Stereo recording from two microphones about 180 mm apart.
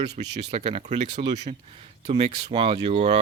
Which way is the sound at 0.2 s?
40° right (ahead or behind).